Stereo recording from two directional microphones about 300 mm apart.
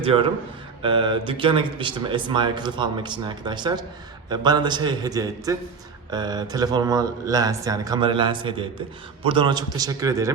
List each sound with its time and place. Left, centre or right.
0.0 s speech: centre